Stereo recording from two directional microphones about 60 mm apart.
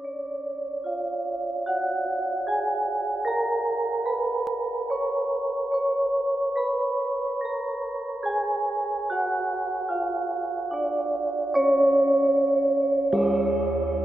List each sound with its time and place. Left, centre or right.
5.7 s music: centre
11.5 s music: centre
12.0 s singing bowl: centre
13.1 s music: centre